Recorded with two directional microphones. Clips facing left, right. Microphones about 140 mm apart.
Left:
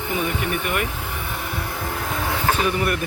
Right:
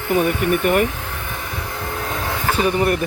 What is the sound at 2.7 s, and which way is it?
Speech, 35° right (ahead or behind).